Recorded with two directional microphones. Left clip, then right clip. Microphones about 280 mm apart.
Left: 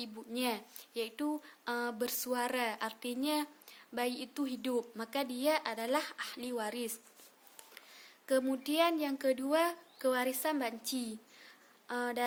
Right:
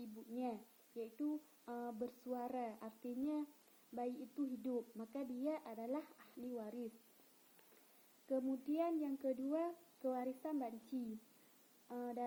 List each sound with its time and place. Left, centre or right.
0.0 s a woman's voice: left
8.3 s a woman's voice: left
11.9 s a woman's voice: left